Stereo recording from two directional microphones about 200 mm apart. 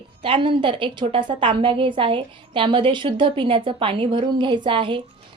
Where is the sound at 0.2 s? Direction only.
25° right (ahead or behind).